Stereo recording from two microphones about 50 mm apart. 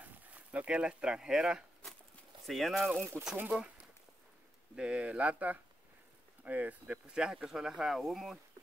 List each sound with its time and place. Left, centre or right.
0.0 s speech: right; by 1.6 s centre
2.4 s speech: centre
3.1 s speech: centre
4.7 s speech: right
7.1 s speech: centre